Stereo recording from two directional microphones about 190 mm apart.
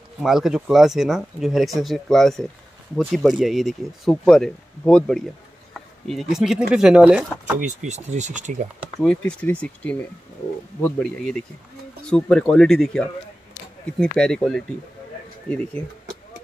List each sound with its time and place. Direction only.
0.2 s speech: centre (ahead or behind)
5.7 s a sound: centre (ahead or behind)
6.7 s speech: 5° right (ahead or behind)
7.5 s speech: 40° right (ahead or behind)
8.8 s speech: 5° left (ahead or behind)